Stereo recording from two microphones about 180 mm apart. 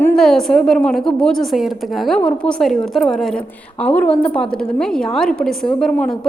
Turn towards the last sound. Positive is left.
turn(degrees=5)  # may be behind; listen again after turning